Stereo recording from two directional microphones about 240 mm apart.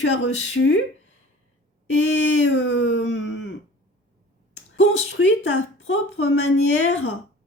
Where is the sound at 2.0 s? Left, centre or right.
Left.